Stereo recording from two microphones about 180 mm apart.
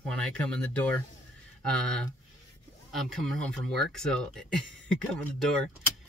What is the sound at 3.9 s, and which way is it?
Speech, 5° left (ahead or behind).